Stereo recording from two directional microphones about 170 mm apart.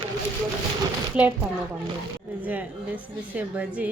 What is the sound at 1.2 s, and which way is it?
Speech, 5° right (ahead or behind).